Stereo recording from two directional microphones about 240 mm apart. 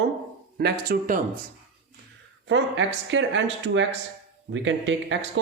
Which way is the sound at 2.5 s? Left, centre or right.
Right.